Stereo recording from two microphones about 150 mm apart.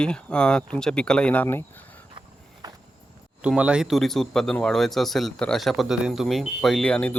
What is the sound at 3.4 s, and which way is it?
Speech, 5° right (ahead or behind).